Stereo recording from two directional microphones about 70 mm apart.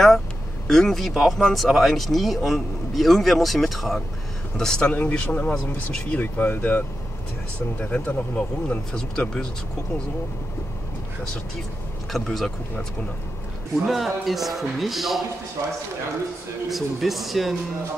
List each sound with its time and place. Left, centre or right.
0.7 s speech: centre
4.8 s speech: left
7.8 s speech: left
12.1 s speech: centre
13.8 s speech: centre
16.6 s speech: centre